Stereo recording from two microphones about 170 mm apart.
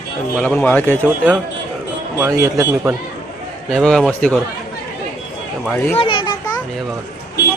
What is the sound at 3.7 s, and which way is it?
Speech, 5° left (ahead or behind).